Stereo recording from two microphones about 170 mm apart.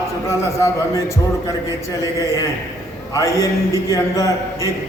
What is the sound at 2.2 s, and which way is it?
A man's voice, 20° left (ahead or behind).